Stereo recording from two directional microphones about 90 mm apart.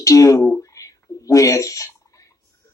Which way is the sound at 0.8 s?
40° left (ahead or behind).